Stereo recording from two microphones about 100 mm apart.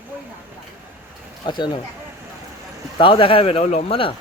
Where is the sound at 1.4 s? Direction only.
50° left (ahead or behind).